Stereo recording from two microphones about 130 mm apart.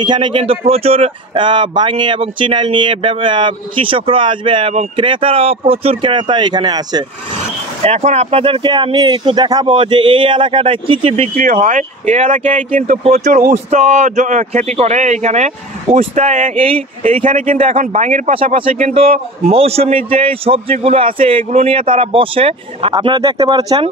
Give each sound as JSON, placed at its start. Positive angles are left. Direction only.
{"t": 0.0, "sound": "speech", "side_deg": -35}
{"t": 7.8, "sound": "speech", "side_deg": -55}
{"t": 11.3, "sound": "speech", "side_deg": -90}
{"t": 13.0, "sound": "speech", "side_deg": -60}
{"t": 16.5, "sound": "a man's voice", "side_deg": -45}
{"t": 17.2, "sound": "a man's voice", "side_deg": -90}
{"t": 17.7, "sound": "speech", "side_deg": -70}
{"t": 18.3, "sound": "a man's voice", "side_deg": -45}